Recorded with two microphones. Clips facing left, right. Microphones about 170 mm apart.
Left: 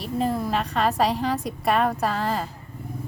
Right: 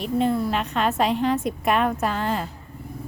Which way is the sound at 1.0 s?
35° left (ahead or behind).